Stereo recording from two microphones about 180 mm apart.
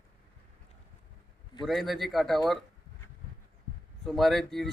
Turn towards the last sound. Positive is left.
turn(degrees=0)  # may be behind; listen again after turning